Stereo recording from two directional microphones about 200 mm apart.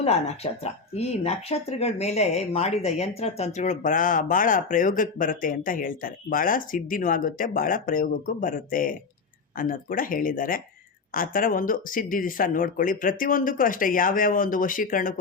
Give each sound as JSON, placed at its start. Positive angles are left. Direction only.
{"t": 0.6, "sound": "speech", "side_deg": 30}